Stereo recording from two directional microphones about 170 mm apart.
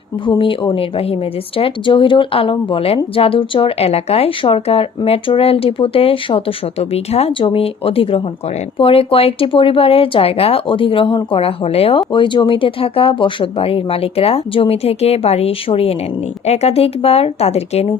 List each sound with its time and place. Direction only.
0.3 s a woman's voice: 30° left (ahead or behind)